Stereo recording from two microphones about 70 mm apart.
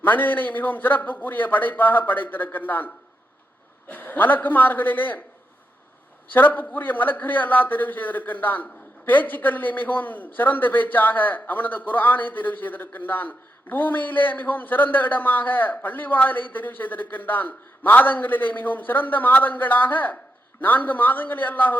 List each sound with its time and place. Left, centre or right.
0.0 s a man's voice: left
6.3 s a man's voice: left